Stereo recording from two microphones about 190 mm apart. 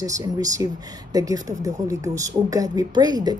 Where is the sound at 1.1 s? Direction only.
20° right (ahead or behind).